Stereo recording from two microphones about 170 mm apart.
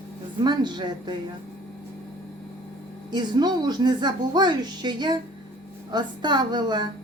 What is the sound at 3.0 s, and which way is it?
A child's voice, 25° right (ahead or behind).